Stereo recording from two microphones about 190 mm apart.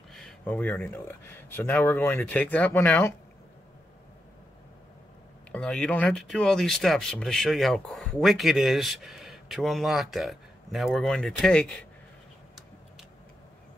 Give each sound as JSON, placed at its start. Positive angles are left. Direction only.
{"t": 0.1, "sound": "speech", "side_deg": 5}
{"t": 5.5, "sound": "speech", "side_deg": 5}